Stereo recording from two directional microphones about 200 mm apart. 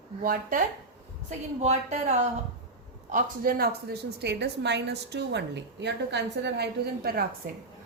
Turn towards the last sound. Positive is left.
turn(degrees=-50)  # may be behind; listen again after turning